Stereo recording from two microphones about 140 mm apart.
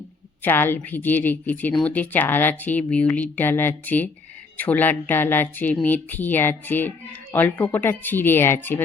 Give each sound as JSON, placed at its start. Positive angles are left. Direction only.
{"t": 0.4, "sound": "speech", "side_deg": 15}